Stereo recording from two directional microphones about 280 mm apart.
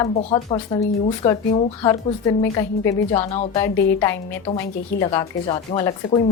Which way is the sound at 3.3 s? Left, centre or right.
Left.